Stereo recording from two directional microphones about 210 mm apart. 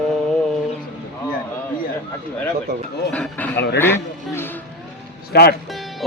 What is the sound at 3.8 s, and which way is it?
Music, 10° left (ahead or behind).